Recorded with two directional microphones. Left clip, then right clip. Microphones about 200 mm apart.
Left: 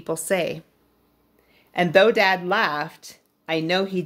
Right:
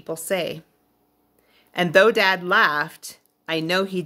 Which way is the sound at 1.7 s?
20° right (ahead or behind).